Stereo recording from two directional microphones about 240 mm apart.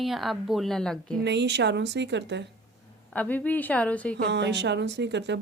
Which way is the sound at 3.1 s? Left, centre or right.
Centre.